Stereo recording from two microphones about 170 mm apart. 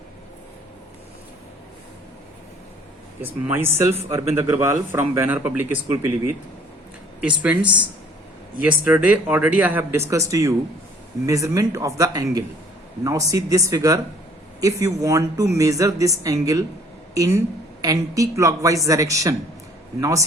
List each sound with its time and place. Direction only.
3.2 s speech: 10° right (ahead or behind)